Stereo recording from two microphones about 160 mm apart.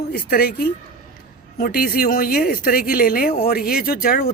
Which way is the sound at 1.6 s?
70° left (ahead or behind).